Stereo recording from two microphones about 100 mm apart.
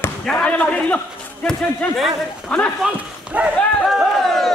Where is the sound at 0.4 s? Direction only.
15° left (ahead or behind).